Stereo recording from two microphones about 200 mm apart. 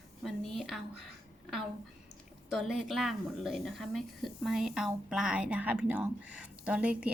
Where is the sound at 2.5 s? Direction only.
Centre (ahead or behind).